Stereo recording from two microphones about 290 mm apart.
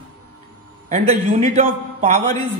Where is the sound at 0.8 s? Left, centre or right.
Right.